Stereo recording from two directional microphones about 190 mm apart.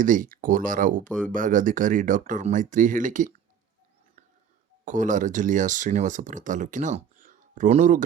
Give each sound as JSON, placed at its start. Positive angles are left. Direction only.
{"t": 0.0, "sound": "speech", "side_deg": -45}
{"t": 4.9, "sound": "speech", "side_deg": -40}